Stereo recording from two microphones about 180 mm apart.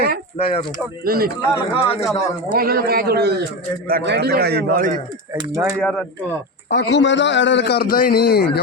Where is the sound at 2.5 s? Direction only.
55° right (ahead or behind).